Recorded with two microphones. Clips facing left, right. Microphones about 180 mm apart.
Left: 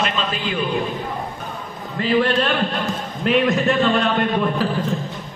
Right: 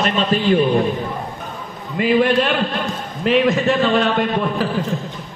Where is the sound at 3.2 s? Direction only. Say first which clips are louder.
Right 2 dB; centre (ahead or behind).